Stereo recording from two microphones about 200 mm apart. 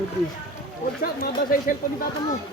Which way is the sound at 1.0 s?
45° left (ahead or behind).